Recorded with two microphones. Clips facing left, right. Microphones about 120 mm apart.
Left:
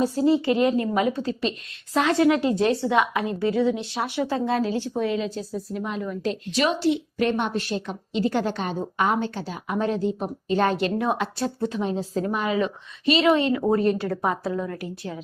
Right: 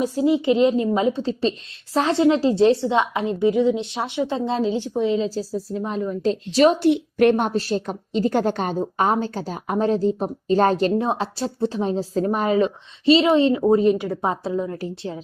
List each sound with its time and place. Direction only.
0.0 s a woman's voice: 15° right (ahead or behind); by 6.7 s 35° right (ahead or behind)
6.7 s a woman's voice: 55° right (ahead or behind); by 13.6 s 25° right (ahead or behind)
13.6 s a woman's voice: 15° right (ahead or behind)